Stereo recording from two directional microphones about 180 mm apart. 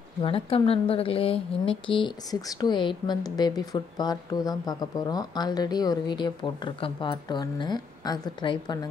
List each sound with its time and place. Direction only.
0.2 s a woman's voice: 30° left (ahead or behind)